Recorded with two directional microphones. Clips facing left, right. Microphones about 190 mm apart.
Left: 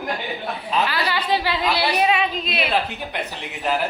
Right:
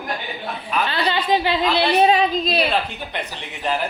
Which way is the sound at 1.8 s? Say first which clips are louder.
Right 6 dB; 30° right (ahead or behind).